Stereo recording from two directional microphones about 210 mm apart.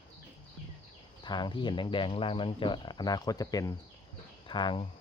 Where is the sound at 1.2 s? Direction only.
20° left (ahead or behind).